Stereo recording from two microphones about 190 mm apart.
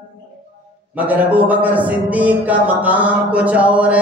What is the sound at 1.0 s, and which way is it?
A man's voice, 10° right (ahead or behind).